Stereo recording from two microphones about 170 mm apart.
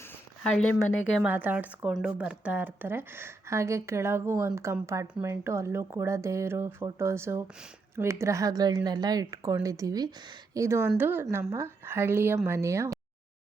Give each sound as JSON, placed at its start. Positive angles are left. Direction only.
{"t": 0.5, "sound": "speech", "side_deg": 5}
{"t": 1.2, "sound": "speech", "side_deg": -10}